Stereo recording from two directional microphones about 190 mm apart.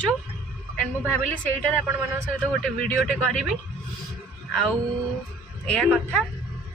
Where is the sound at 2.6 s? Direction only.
5° left (ahead or behind).